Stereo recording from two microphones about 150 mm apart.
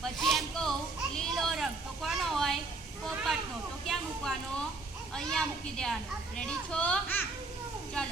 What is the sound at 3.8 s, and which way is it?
Speech, centre (ahead or behind).